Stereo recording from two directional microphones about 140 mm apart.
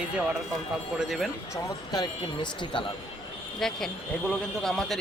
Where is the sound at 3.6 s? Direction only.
Centre (ahead or behind).